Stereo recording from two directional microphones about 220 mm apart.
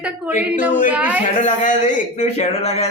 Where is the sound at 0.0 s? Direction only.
10° right (ahead or behind).